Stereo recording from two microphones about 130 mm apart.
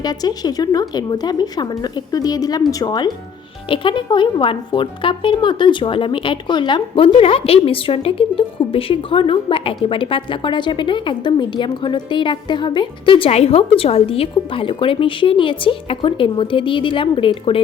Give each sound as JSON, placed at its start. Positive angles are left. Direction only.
{"t": 0.0, "sound": "a woman's voice", "side_deg": 30}